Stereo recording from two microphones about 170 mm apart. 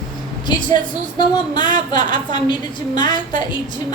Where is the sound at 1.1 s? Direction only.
25° left (ahead or behind).